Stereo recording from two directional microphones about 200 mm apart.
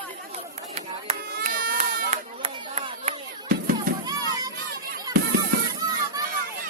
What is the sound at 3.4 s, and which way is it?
Music, 50° right (ahead or behind).